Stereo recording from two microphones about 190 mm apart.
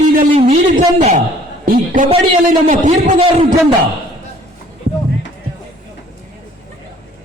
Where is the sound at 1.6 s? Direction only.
50° right (ahead or behind).